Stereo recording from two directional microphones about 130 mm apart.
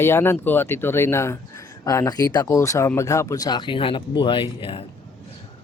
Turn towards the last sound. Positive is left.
turn(degrees=45)  # may be behind; listen again after turning